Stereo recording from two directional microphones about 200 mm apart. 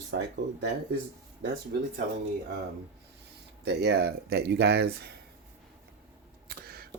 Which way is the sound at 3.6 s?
55° right (ahead or behind).